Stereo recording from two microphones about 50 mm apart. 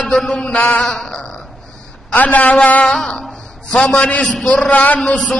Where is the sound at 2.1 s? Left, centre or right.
Left.